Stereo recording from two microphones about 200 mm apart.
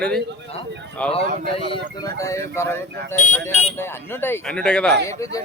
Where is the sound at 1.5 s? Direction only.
20° left (ahead or behind).